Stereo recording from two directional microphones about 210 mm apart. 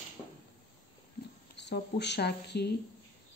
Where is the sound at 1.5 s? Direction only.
55° left (ahead or behind).